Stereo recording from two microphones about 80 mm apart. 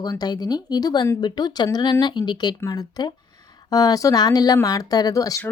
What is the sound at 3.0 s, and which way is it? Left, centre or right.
Speech, left.